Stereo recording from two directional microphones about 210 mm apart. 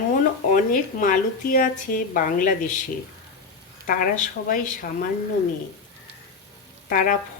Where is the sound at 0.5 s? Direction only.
40° left (ahead or behind).